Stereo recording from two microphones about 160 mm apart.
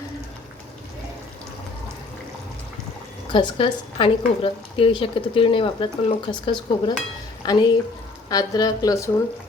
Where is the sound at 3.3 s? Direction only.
30° left (ahead or behind).